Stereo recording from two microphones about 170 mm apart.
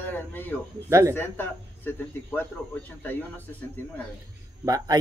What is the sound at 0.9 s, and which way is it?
Speech, 15° right (ahead or behind).